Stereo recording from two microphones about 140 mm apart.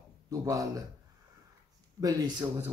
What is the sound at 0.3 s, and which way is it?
Speech, 25° right (ahead or behind).